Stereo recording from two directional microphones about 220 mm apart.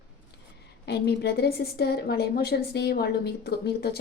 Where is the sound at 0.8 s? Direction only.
50° left (ahead or behind).